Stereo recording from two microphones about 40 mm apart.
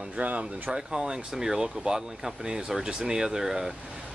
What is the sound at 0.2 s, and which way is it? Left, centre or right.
Speech, right.